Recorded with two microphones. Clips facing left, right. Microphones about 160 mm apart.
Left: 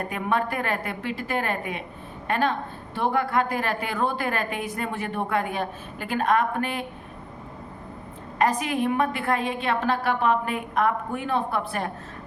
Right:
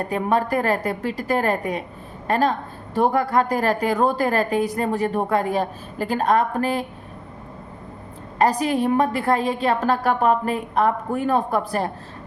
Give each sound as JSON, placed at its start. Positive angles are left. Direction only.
{"t": 0.0, "sound": "a woman's voice", "side_deg": -35}
{"t": 8.4, "sound": "a woman's voice", "side_deg": -35}